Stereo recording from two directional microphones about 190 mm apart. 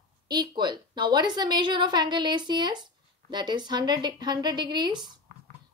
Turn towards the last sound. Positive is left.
turn(degrees=-20)  # may be behind; listen again after turning